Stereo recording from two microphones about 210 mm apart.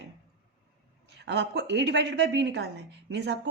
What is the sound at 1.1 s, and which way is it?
A woman's voice, 55° right (ahead or behind).